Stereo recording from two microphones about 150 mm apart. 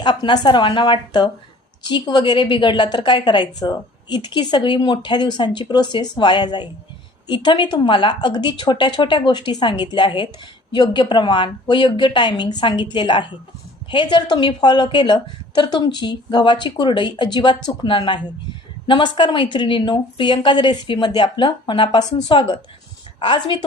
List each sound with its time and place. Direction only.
0.0 s a woman's voice: 30° left (ahead or behind)